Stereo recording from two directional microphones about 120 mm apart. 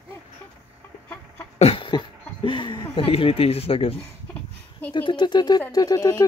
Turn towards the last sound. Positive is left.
turn(degrees=30)  # may be behind; listen again after turning